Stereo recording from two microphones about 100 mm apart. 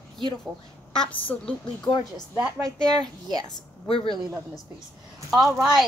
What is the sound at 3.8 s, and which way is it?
Speech, 65° left (ahead or behind).